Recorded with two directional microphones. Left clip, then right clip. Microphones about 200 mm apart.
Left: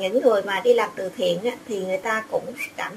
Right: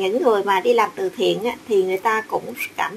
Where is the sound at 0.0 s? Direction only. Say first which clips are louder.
Right 1 dB; 30° right (ahead or behind).